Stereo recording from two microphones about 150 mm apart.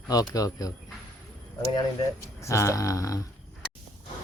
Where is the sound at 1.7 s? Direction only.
20° left (ahead or behind).